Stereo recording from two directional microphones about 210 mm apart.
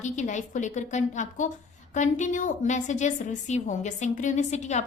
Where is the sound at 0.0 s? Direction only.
35° left (ahead or behind).